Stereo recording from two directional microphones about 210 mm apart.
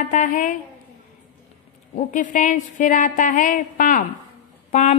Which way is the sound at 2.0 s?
40° left (ahead or behind).